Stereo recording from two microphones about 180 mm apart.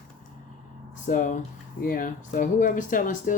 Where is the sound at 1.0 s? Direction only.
45° left (ahead or behind).